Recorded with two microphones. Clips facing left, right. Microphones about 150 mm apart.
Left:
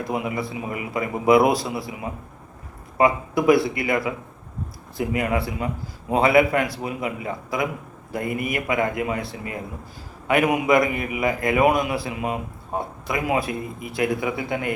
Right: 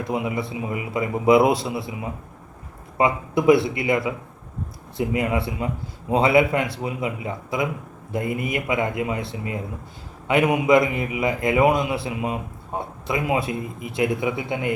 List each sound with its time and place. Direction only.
0.1 s a man's voice: 25° right (ahead or behind)
3.0 s a man's voice: 25° right (ahead or behind)